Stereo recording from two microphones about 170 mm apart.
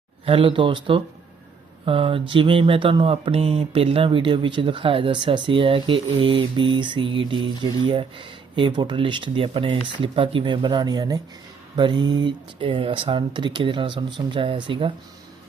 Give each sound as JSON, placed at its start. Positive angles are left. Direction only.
{"t": 0.3, "sound": "speech", "side_deg": -30}